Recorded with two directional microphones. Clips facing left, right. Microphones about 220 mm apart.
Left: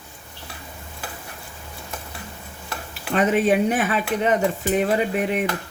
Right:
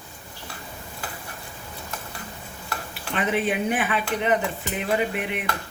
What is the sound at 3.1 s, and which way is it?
Speech, 40° left (ahead or behind).